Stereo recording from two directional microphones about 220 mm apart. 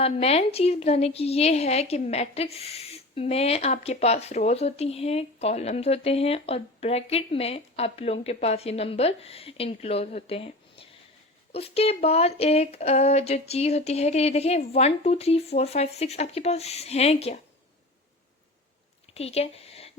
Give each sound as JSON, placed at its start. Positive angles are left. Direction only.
{"t": 0.0, "sound": "a woman's voice", "side_deg": 25}
{"t": 19.1, "sound": "a woman's voice", "side_deg": 30}